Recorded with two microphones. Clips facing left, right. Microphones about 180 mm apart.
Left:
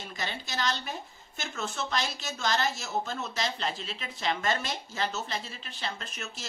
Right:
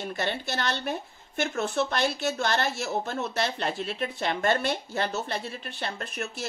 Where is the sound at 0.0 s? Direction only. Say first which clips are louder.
Right 7 dB; 60° right (ahead or behind).